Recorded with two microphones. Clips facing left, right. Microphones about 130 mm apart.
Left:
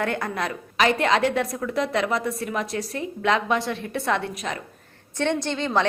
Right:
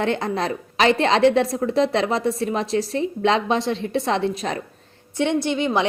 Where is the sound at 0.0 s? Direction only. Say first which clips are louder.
Right 4 dB; 25° right (ahead or behind).